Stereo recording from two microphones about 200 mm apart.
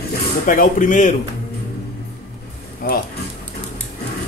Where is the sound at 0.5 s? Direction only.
40° left (ahead or behind).